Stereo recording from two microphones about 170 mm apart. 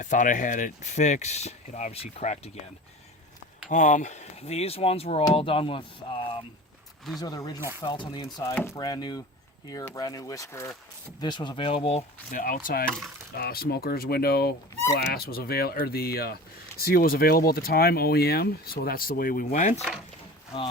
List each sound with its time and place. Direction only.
0.0 s speech: 50° left (ahead or behind)
3.7 s speech: 45° left (ahead or behind); by 8.4 s 30° left (ahead or behind)
8.4 s speech: 15° left (ahead or behind); by 12.0 s 35° left (ahead or behind)
12.3 s speech: 55° left (ahead or behind)
12.8 s speech: 5° left (ahead or behind)
13.3 s speech: 65° left (ahead or behind); by 19.8 s 45° left (ahead or behind)